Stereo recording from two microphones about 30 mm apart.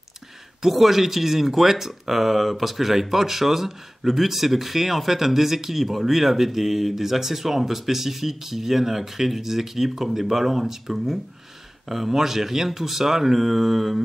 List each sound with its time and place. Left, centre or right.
0.6 s speech: centre